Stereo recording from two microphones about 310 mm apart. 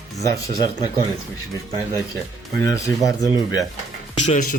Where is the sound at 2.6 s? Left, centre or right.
Centre.